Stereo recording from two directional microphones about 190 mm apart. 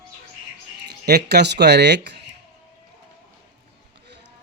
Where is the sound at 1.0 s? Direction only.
60° right (ahead or behind).